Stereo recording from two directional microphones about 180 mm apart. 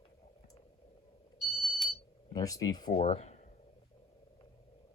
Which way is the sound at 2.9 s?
35° left (ahead or behind).